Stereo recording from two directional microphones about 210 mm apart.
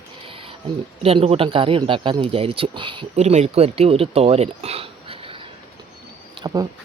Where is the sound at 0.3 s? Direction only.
25° right (ahead or behind).